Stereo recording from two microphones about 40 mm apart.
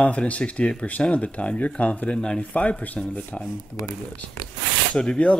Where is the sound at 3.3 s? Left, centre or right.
Left.